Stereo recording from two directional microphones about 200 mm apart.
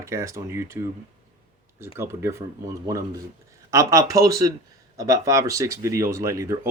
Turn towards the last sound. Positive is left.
turn(degrees=-15)  # may be behind; listen again after turning